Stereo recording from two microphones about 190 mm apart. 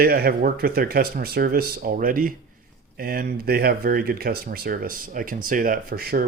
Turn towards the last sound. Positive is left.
turn(degrees=-50)  # may be behind; listen again after turning